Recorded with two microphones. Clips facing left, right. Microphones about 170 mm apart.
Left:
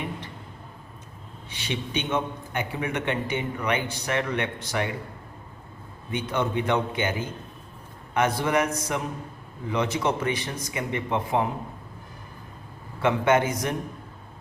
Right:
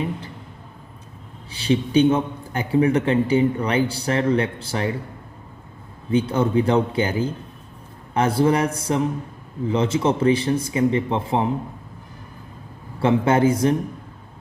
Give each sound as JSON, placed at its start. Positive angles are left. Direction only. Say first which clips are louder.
{"t": 1.5, "sound": "a man's voice", "louder": "right 11 dB", "side_deg": -30}
{"t": 6.1, "sound": "a man's voice", "louder": "right 7 dB", "side_deg": -30}
{"t": 13.0, "sound": "a man's voice", "louder": "right 4 dB", "side_deg": -30}